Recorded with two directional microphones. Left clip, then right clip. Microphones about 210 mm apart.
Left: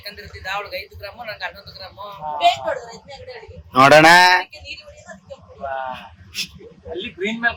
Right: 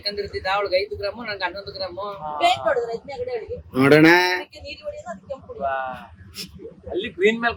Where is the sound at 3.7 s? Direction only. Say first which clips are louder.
Left 5 dB; 5° right (ahead or behind).